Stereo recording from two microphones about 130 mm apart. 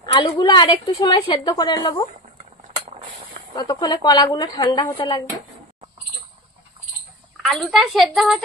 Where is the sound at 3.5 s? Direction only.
30° left (ahead or behind).